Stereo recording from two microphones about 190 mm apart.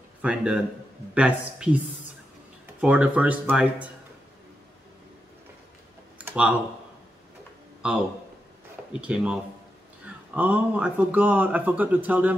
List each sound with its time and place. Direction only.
0.2 s speech: 5° right (ahead or behind)
2.8 s speech: 5° right (ahead or behind)
6.1 s computer keyboard: 5° right (ahead or behind)
7.8 s speech: 5° right (ahead or behind)
9.0 s speech: 5° right (ahead or behind)